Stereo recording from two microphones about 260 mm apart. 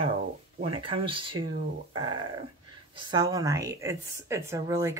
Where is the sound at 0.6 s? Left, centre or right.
Centre.